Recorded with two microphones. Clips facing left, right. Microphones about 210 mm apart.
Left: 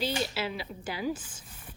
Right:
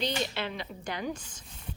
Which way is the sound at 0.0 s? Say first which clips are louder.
Left 1 dB; 5° left (ahead or behind).